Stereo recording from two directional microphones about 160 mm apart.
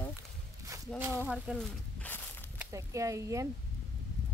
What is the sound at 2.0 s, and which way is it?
Walk, 15° left (ahead or behind).